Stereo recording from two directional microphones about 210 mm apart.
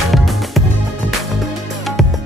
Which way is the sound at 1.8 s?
Centre (ahead or behind).